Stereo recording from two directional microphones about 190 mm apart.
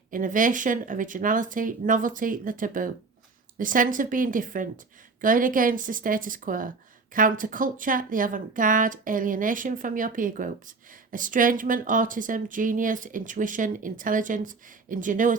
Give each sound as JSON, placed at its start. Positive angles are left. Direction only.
{"t": 0.1, "sound": "speech", "side_deg": -45}